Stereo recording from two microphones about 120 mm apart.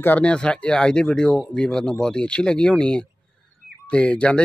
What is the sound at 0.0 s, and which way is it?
Speech, 10° left (ahead or behind).